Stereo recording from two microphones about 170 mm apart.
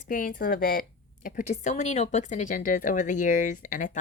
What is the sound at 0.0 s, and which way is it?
A woman's voice, 55° left (ahead or behind).